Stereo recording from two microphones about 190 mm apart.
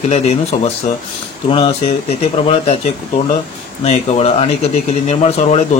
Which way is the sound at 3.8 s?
35° left (ahead or behind).